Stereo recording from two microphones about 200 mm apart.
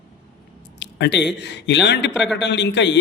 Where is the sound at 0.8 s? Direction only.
60° left (ahead or behind).